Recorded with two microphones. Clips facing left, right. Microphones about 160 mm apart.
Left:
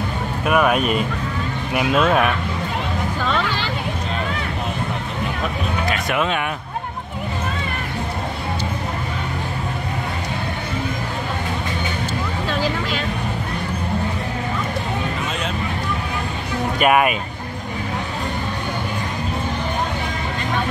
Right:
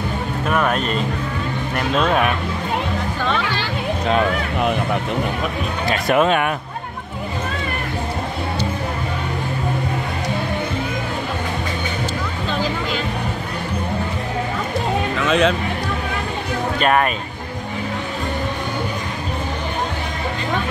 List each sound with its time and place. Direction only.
0.5 s speech: 10° left (ahead or behind)
4.1 s speech: 70° right (ahead or behind)
5.9 s speech: 40° right (ahead or behind)
15.2 s speech: 90° right
16.8 s speech: 10° left (ahead or behind)